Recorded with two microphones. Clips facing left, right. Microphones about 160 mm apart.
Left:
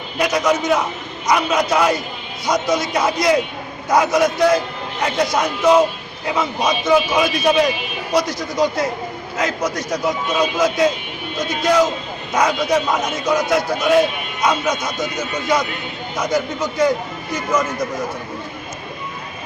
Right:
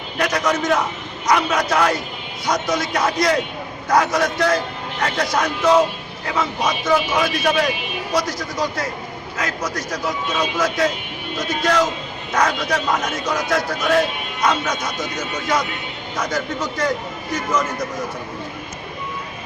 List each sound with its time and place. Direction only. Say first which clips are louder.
0.2 s a man's voice: left 3 dB; 10° left (ahead or behind)
16.1 s a man's voice: left 3 dB; 10° left (ahead or behind)